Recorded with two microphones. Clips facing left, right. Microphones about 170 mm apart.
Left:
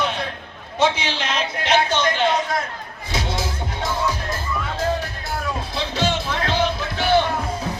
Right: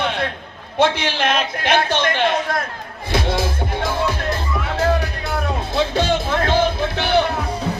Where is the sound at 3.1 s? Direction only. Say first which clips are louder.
Right 5 dB; 55° right (ahead or behind).